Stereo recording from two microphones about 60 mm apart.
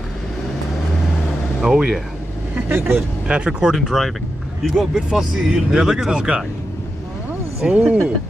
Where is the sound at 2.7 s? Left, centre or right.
Right.